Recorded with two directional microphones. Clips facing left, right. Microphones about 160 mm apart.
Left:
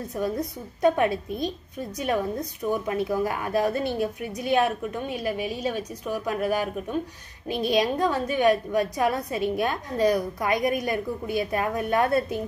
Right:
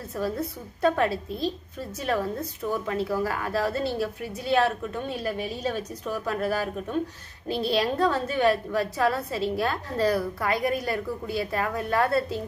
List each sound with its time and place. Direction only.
0.1 s a woman's voice: 15° left (ahead or behind)